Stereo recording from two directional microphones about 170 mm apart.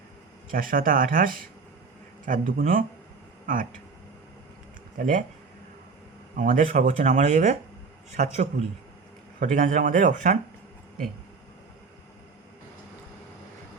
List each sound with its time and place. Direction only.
0.5 s speech: 55° right (ahead or behind)
4.9 s speech: 50° right (ahead or behind)
6.3 s speech: 55° right (ahead or behind)